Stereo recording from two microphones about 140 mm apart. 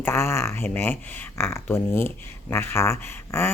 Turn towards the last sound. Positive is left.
turn(degrees=20)  # may be behind; listen again after turning